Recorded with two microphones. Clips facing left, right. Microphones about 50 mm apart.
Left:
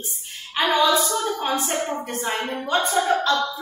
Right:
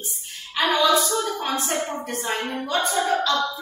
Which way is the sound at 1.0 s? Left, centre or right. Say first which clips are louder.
Even; centre.